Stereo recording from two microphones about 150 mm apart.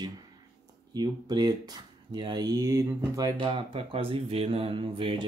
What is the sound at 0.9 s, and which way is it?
Speech, 25° right (ahead or behind).